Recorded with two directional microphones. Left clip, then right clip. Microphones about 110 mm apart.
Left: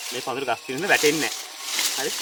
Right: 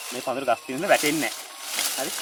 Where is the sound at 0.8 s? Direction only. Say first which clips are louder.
Left 1 dB; 10° right (ahead or behind).